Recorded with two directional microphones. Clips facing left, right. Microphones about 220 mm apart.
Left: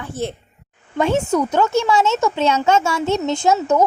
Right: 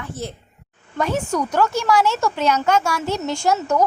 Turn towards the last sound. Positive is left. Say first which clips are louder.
# left 3 dB
turn(degrees=20)  # may be behind; listen again after turning